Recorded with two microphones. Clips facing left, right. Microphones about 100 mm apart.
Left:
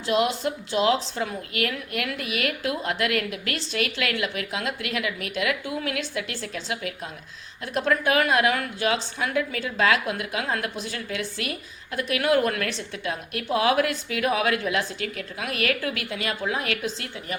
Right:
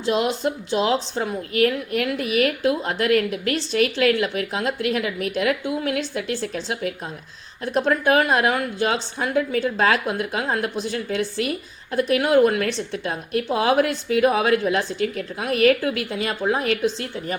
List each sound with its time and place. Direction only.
1.1 s a woman's voice: 30° right (ahead or behind)